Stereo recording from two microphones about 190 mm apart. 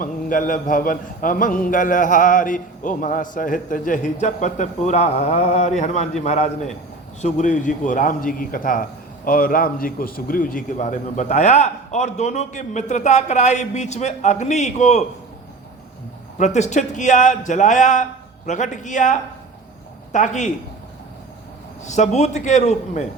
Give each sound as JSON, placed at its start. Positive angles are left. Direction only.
{"t": 0.0, "sound": "a man's voice", "side_deg": 45}
{"t": 16.4, "sound": "a man's voice", "side_deg": 40}
{"t": 21.8, "sound": "a man's voice", "side_deg": 40}